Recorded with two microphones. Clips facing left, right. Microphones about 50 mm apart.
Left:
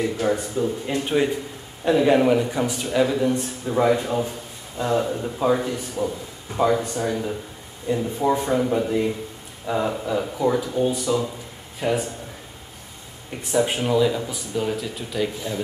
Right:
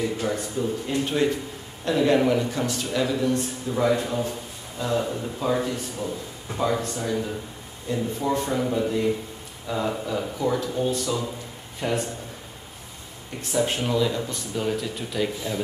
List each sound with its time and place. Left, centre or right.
0.0 s speech: centre
5.0 s a man's voice: centre
13.4 s speech: centre